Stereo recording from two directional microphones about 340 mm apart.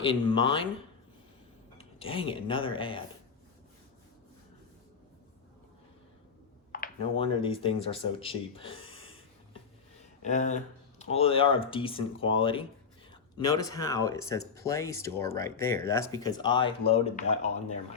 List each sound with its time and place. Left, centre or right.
0.0 s speech: centre
1.8 s speech: centre
6.7 s speech: left
10.2 s speech: left